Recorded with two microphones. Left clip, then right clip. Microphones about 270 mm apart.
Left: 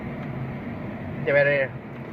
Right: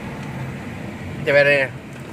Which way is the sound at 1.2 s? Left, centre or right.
Right.